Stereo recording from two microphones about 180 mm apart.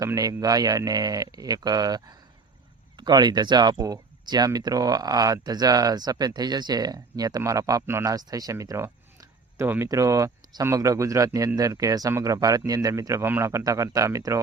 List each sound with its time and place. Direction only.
0.0 s speech: 20° right (ahead or behind)